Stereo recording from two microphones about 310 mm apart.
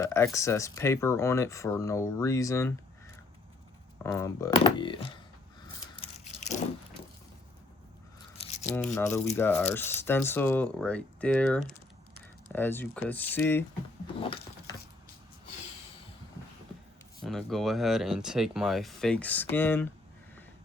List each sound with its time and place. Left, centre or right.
0.0 s speech: centre
3.9 s speech: centre
6.0 s biting: left
8.4 s a sound: left
8.7 s speech: centre
14.2 s a sound: centre
17.2 s speech: centre